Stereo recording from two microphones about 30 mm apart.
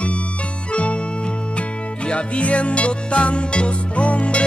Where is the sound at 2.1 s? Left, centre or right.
Left.